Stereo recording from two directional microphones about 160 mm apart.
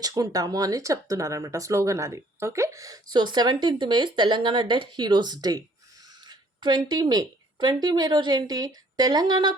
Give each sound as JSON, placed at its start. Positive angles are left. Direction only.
{"t": 0.0, "sound": "a woman's voice", "side_deg": -25}